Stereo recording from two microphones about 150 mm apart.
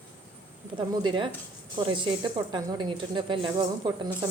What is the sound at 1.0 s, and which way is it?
Speech, 35° right (ahead or behind).